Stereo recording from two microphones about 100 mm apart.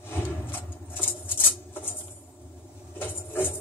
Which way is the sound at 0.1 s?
20° left (ahead or behind).